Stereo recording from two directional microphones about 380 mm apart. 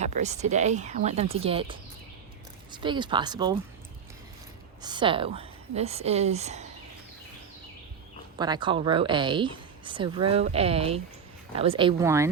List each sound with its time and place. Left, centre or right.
0.0 s speech: centre
2.7 s speech: centre
4.8 s speech: centre
8.4 s speech: centre